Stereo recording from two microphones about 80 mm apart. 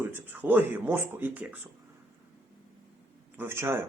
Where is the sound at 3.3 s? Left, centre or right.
Right.